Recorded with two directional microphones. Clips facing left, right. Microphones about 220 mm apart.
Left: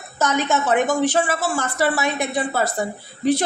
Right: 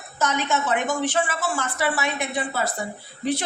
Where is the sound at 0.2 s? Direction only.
40° left (ahead or behind).